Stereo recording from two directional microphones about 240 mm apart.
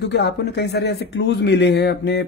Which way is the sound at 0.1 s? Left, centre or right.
Left.